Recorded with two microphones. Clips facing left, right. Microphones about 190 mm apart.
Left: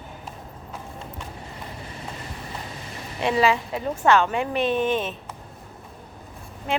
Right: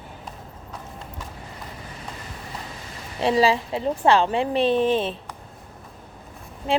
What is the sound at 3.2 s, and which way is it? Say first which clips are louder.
A woman's voice: right 2 dB; 35° right (ahead or behind).